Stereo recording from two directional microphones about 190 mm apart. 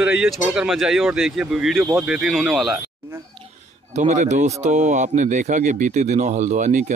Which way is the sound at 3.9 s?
40° right (ahead or behind).